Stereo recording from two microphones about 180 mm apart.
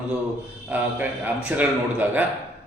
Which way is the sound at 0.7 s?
10° right (ahead or behind).